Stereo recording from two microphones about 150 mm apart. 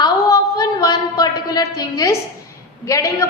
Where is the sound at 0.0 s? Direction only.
25° left (ahead or behind).